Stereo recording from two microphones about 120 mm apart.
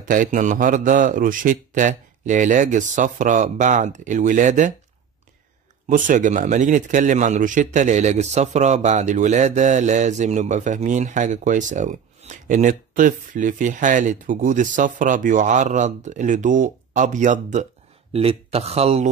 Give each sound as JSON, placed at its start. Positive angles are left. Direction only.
{"t": 0.0, "sound": "a man's voice", "side_deg": -90}
{"t": 5.9, "sound": "a man's voice", "side_deg": -90}
{"t": 18.1, "sound": "speech", "side_deg": -55}